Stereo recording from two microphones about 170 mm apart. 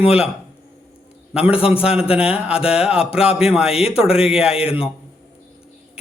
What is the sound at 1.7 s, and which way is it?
Speech, 5° right (ahead or behind).